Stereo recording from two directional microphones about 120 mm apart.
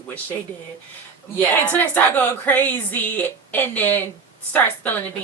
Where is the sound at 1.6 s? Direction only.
15° left (ahead or behind).